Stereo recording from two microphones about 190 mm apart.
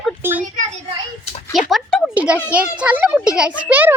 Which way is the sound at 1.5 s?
Centre (ahead or behind).